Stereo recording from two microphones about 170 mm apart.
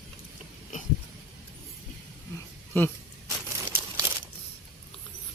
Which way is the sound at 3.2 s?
15° right (ahead or behind).